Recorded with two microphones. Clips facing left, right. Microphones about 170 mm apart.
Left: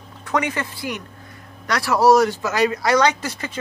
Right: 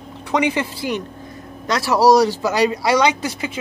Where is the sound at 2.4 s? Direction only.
10° right (ahead or behind).